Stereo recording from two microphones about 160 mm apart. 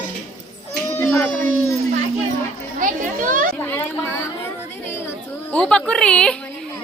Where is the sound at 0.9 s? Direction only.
15° left (ahead or behind).